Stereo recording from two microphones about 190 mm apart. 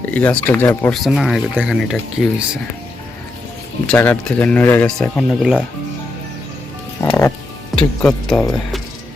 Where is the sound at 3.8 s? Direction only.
10° left (ahead or behind).